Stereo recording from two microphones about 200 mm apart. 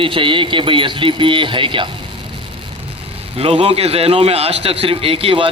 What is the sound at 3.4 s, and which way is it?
A man's voice, 30° right (ahead or behind).